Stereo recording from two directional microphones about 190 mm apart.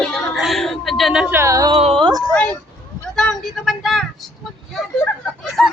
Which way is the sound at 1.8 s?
30° right (ahead or behind).